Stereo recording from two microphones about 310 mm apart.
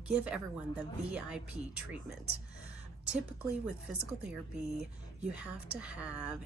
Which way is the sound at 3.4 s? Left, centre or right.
Centre.